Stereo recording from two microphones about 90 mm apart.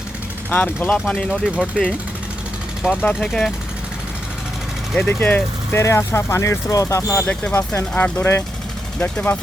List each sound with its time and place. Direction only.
0.5 s speech: 20° left (ahead or behind)
0.9 s speech: 10° left (ahead or behind)
2.8 s speech: 10° right (ahead or behind)
3.2 s speech: 5° left (ahead or behind)
4.9 s speech: 20° left (ahead or behind)
5.8 s speech: 30° left (ahead or behind)
7.9 s speech: 15° left (ahead or behind)